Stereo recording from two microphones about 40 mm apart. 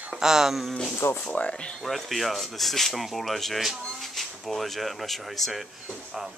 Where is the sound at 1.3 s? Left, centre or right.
Left.